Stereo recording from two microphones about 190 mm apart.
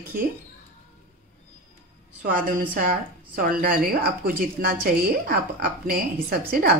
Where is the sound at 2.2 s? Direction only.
45° right (ahead or behind).